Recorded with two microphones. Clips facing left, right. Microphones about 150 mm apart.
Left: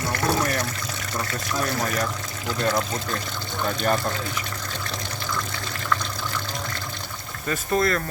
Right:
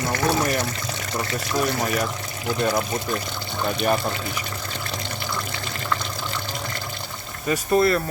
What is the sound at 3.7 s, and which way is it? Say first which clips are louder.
Water: right 2 dB; 15° right (ahead or behind).